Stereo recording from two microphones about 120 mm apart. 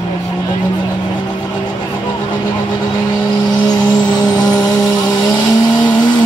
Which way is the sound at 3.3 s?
35° left (ahead or behind).